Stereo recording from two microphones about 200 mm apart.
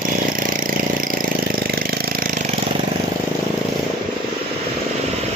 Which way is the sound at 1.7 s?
45° right (ahead or behind).